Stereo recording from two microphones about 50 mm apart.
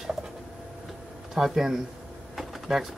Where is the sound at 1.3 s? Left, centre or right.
Centre.